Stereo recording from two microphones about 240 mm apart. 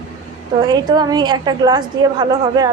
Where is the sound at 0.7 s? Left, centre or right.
Centre.